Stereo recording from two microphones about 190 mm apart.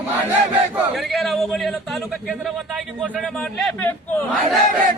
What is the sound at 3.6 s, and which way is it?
Speech, 5° left (ahead or behind).